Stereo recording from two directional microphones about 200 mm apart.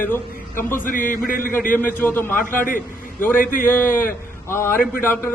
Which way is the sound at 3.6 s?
10° left (ahead or behind).